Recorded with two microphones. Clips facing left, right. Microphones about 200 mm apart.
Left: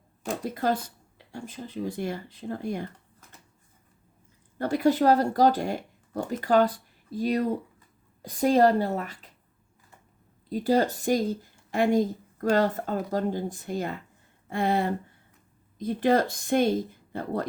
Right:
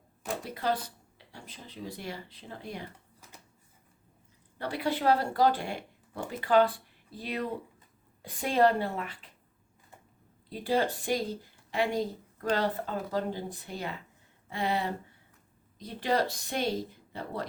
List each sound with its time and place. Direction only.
0.3 s speech: 45° left (ahead or behind)
4.5 s a woman's voice: 45° left (ahead or behind)
10.5 s speech: 40° left (ahead or behind)